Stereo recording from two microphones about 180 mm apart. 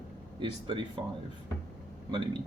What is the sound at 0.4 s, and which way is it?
Speech, 30° right (ahead or behind).